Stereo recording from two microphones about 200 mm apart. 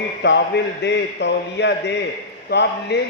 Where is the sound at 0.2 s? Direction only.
60° left (ahead or behind).